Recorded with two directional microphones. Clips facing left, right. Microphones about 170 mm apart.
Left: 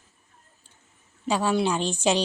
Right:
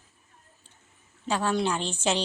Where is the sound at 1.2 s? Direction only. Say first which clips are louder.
Left 3 dB; 10° left (ahead or behind).